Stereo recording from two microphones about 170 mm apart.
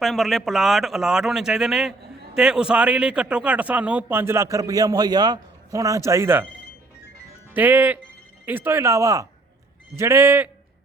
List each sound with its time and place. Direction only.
0.0 s speech: centre (ahead or behind); by 6.4 s 15° right (ahead or behind)
7.5 s speech: 10° right (ahead or behind)